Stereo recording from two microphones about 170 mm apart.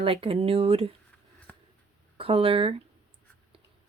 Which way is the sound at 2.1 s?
30° right (ahead or behind).